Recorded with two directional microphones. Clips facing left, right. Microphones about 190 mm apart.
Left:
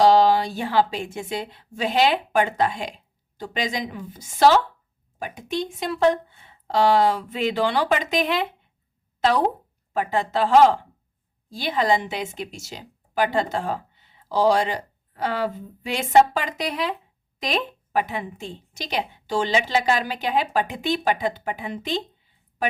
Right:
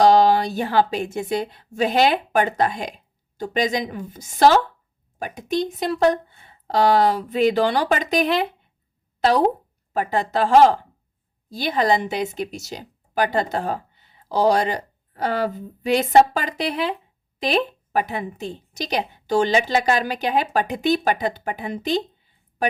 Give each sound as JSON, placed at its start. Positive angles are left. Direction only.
{"t": 0.0, "sound": "a woman's voice", "side_deg": -45}
{"t": 9.9, "sound": "a woman's voice", "side_deg": -40}